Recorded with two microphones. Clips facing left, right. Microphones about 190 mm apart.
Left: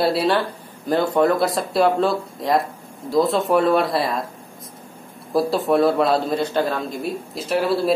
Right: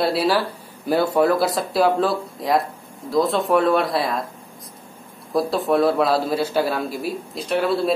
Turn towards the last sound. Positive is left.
turn(degrees=0)  # may be behind; listen again after turning